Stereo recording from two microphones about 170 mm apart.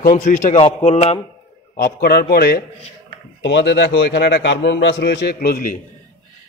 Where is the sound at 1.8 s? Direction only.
60° left (ahead or behind).